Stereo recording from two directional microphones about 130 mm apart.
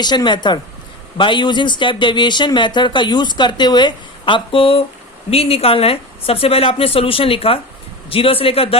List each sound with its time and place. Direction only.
0.0 s a woman's voice: 35° left (ahead or behind)